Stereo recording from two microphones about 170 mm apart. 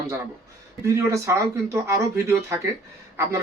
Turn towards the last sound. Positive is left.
turn(degrees=-15)  # may be behind; listen again after turning